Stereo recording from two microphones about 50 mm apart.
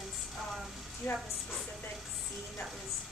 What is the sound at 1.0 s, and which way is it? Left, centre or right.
Speech, left.